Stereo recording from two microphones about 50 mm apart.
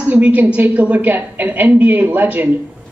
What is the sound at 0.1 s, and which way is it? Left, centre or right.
A man's voice, right.